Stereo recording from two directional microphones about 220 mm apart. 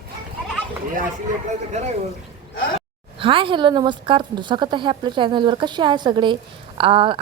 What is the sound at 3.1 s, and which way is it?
A woman's voice, 25° right (ahead or behind).